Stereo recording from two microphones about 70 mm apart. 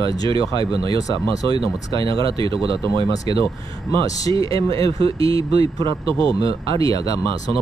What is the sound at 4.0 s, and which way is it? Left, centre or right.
Speech, left.